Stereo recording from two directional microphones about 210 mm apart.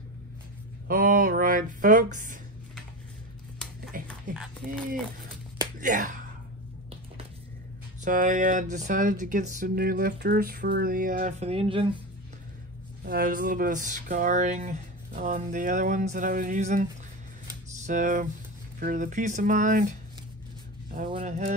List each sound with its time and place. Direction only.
0.8 s speech: 40° right (ahead or behind)
4.1 s a sound: centre (ahead or behind)
5.8 s speech: 40° right (ahead or behind)
8.0 s speech: 40° right (ahead or behind)
13.0 s speech: 45° right (ahead or behind)
17.8 s speech: 40° right (ahead or behind)
20.9 s speech: 35° right (ahead or behind)